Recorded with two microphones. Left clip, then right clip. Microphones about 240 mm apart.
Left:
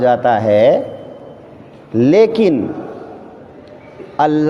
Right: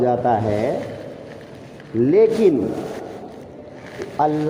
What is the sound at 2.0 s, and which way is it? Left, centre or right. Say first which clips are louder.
Speech: left 4 dB; left.